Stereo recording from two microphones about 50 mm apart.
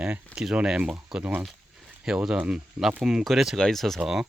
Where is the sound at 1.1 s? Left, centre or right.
Centre.